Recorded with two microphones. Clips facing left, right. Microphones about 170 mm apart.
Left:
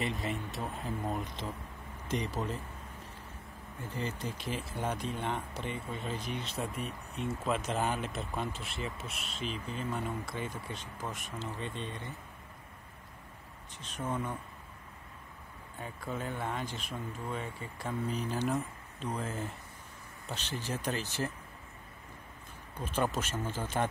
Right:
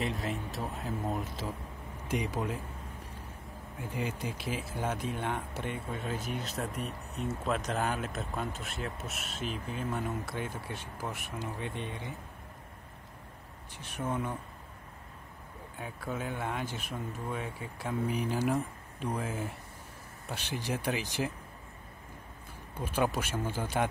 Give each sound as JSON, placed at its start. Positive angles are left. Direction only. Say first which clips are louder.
{"t": 0.0, "sound": "speech", "louder": "right 1 dB", "side_deg": 0}
{"t": 3.8, "sound": "speech", "louder": "right 2 dB", "side_deg": -10}
{"t": 9.4, "sound": "speech", "louder": "right 1 dB", "side_deg": -55}
{"t": 9.9, "sound": "speech", "louder": "right 2 dB", "side_deg": -5}
{"t": 13.7, "sound": "speech", "louder": "right 2 dB", "side_deg": -10}
{"t": 15.8, "sound": "speech", "louder": "right 1 dB", "side_deg": -5}
{"t": 22.8, "sound": "speech", "louder": "right 2 dB", "side_deg": -10}